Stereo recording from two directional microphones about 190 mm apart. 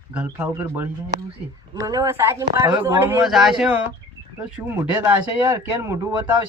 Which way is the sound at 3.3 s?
Centre (ahead or behind).